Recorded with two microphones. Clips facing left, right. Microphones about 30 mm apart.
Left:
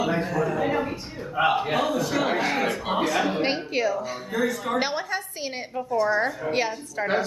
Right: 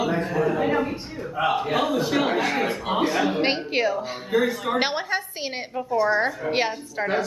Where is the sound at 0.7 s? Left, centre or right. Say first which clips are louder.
Right 2 dB; centre.